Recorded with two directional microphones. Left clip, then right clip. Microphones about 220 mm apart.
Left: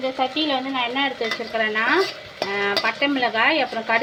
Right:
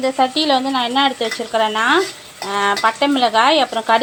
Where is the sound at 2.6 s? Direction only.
25° right (ahead or behind).